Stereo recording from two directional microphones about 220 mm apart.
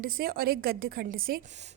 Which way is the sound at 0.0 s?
40° right (ahead or behind).